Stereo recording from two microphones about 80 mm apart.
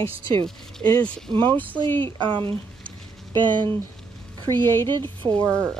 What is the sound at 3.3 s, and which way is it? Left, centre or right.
Speech, right.